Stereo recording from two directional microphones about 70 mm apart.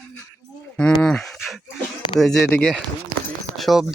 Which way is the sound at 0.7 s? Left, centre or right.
Centre.